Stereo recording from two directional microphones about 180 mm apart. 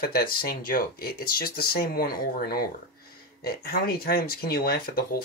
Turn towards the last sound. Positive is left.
turn(degrees=55)  # may be behind; listen again after turning